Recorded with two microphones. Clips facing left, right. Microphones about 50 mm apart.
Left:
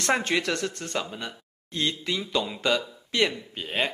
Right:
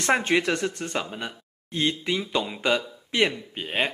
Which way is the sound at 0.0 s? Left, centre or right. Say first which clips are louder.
Right 3 dB; centre.